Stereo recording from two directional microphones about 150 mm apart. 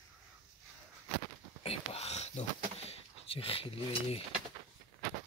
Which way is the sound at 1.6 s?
45° left (ahead or behind).